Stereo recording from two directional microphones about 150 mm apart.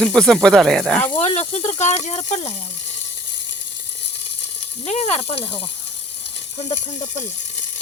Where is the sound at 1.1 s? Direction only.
50° left (ahead or behind).